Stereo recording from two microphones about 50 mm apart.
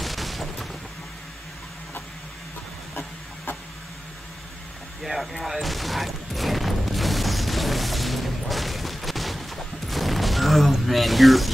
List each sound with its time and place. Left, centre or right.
0.0 s fusillade: centre
5.0 s fusillade: centre
9.8 s mechanisms: centre